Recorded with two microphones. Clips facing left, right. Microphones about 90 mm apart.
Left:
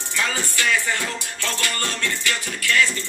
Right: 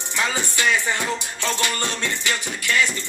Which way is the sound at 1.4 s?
20° right (ahead or behind).